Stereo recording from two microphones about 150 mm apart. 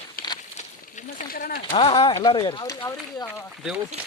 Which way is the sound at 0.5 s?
50° left (ahead or behind).